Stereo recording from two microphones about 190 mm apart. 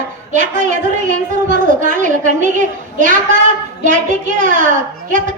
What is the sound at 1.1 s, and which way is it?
A woman's voice, 45° right (ahead or behind).